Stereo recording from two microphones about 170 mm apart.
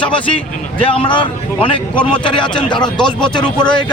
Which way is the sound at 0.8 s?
30° left (ahead or behind).